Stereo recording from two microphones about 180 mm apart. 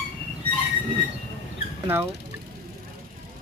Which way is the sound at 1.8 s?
15° right (ahead or behind).